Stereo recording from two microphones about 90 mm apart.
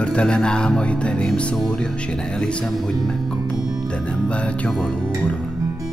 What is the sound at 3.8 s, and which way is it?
Music, 10° left (ahead or behind).